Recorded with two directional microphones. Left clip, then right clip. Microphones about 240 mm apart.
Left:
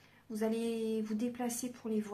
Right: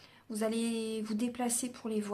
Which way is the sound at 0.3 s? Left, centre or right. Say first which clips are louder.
Right 1 dB; right.